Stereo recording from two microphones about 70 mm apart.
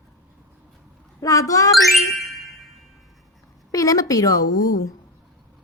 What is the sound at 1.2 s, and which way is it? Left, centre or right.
Speech, left.